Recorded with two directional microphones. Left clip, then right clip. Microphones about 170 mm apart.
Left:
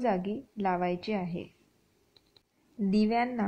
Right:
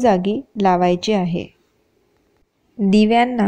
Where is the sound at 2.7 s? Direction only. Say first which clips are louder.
Right 13 dB; 35° right (ahead or behind).